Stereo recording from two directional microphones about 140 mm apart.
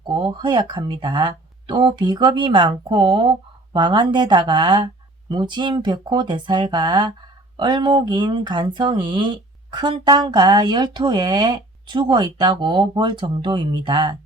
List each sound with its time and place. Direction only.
0.1 s speech: 35° right (ahead or behind)